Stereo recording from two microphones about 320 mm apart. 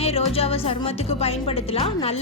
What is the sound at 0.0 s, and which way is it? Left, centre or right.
Speech, centre.